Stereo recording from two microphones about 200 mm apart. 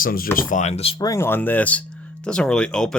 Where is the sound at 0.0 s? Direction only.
45° left (ahead or behind).